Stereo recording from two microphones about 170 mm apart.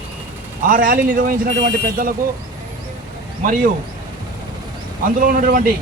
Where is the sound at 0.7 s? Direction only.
60° right (ahead or behind).